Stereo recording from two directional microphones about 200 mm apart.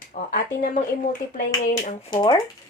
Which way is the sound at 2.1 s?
25° left (ahead or behind).